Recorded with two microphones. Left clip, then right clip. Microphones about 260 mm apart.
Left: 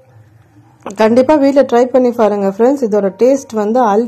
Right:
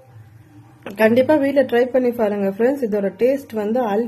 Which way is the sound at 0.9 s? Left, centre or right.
Centre.